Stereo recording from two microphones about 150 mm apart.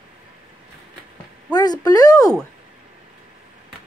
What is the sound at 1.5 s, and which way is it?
Speech, 25° left (ahead or behind).